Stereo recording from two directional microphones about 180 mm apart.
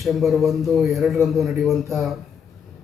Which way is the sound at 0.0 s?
Centre (ahead or behind).